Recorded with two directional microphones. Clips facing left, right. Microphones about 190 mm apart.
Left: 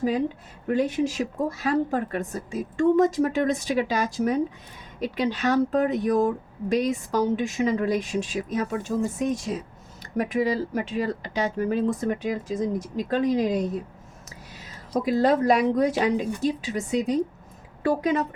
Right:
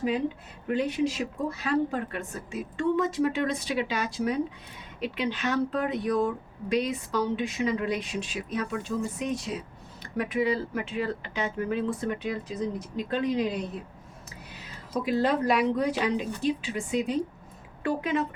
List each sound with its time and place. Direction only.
0.7 s speech: 45° left (ahead or behind)
15.0 s speech: 40° left (ahead or behind)